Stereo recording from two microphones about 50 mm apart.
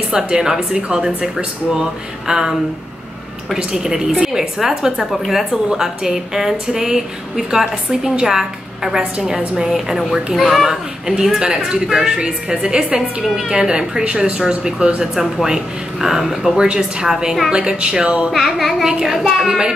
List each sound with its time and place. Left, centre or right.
0.1 s a woman's voice: centre
3.7 s a woman's voice: centre
9.7 s music: centre
10.3 s a woman's voice: centre
16.5 s a woman's voice: centre
18.3 s music: centre
19.1 s a woman's voice: centre